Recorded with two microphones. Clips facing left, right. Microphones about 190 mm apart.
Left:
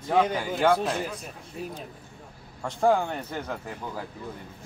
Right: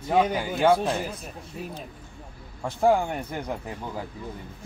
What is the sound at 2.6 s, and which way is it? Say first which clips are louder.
Speech: right 1 dB; 10° right (ahead or behind).